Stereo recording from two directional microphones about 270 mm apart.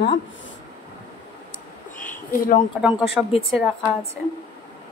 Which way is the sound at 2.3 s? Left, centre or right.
Left.